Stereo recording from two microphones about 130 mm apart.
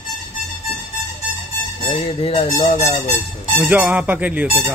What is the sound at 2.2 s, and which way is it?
Speech, 45° left (ahead or behind).